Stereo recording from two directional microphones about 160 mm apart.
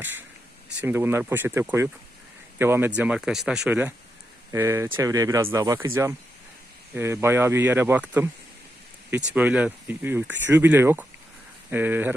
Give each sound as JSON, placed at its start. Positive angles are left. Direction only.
{"t": 0.0, "sound": "speech", "side_deg": -10}